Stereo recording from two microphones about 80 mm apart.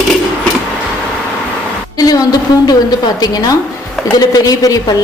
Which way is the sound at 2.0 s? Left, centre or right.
Left.